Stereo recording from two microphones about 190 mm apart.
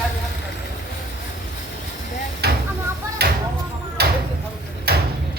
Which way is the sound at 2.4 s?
55° right (ahead or behind).